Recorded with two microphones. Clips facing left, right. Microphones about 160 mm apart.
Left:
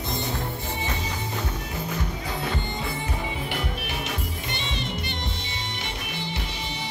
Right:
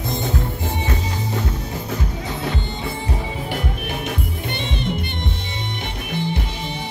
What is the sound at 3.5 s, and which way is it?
Music, 50° right (ahead or behind).